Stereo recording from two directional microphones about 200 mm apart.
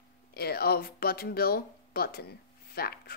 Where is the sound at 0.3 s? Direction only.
50° left (ahead or behind).